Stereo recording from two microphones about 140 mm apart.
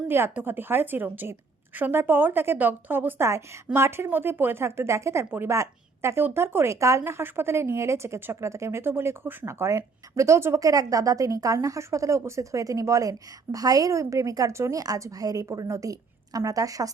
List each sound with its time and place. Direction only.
0.1 s a woman's voice: 15° right (ahead or behind)